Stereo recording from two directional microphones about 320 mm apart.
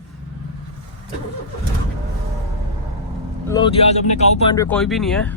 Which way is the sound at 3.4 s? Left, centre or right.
Centre.